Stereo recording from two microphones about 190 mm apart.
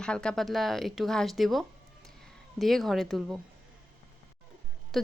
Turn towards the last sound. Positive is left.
turn(degrees=0)  # may be behind; listen again after turning